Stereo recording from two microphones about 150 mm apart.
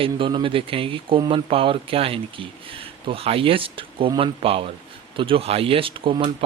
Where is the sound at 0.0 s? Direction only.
35° right (ahead or behind).